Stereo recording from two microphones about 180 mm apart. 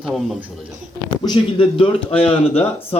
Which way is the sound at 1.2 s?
25° left (ahead or behind).